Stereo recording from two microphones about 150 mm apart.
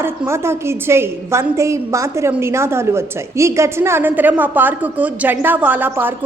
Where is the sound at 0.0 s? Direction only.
15° right (ahead or behind).